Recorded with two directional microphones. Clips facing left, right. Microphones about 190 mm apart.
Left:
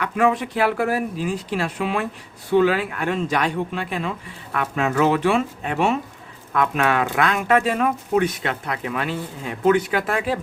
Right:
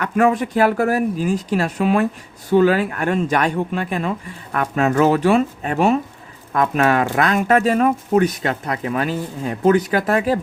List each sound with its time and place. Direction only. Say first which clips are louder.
0.0 s speech: right 3 dB; 45° right (ahead or behind)